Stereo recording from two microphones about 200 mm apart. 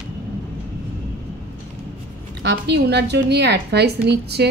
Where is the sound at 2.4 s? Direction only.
55° right (ahead or behind).